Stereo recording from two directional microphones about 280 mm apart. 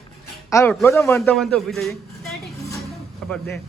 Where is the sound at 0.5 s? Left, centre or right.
Centre.